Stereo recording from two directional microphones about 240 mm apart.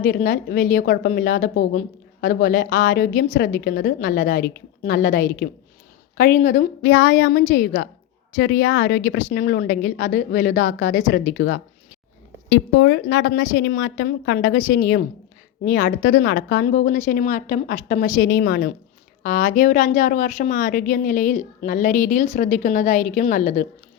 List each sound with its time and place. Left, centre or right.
0.0 s a woman's voice: left
6.8 s a woman's voice: left
12.5 s a woman's voice: left